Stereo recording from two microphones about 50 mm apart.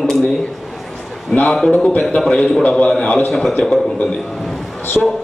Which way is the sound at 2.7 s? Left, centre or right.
Left.